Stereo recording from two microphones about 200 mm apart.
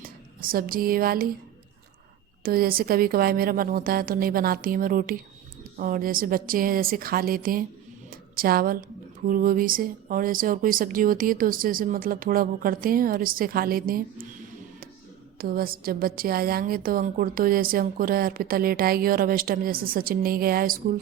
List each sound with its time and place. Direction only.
0.0 s speech: 45° right (ahead or behind)
2.4 s a woman's voice: 50° right (ahead or behind)
8.1 s a sound: 50° right (ahead or behind)
9.2 s a woman's voice: 45° right (ahead or behind)
15.4 s a woman's voice: 45° right (ahead or behind)